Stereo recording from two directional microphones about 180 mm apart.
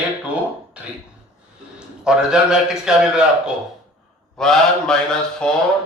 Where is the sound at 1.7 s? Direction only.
5° right (ahead or behind).